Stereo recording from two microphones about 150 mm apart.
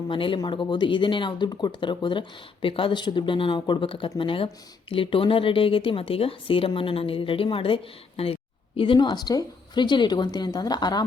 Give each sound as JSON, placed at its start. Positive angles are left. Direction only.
{"t": 0.1, "sound": "speech", "side_deg": 35}